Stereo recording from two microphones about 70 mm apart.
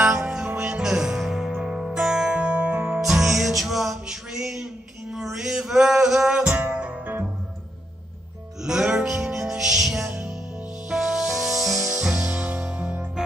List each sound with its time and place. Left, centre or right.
0.0 s music: centre
3.0 s music: centre
6.4 s music: right
8.6 s music: centre